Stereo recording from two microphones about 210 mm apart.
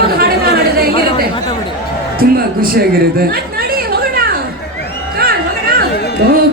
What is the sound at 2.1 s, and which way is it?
Chatter, 45° right (ahead or behind).